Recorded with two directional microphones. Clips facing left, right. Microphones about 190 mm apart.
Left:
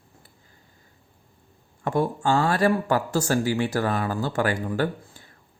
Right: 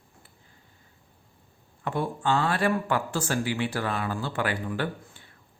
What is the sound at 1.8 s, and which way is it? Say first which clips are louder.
Speech: left 4 dB; 40° left (ahead or behind).